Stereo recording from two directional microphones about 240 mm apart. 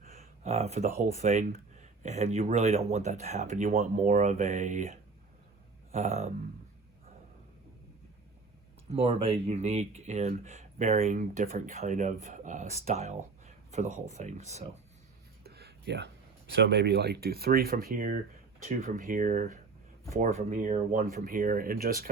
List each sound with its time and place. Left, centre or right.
0.4 s speech: right
8.9 s speech: right
14.2 s speech: right
15.4 s a sound: right
16.5 s speech: right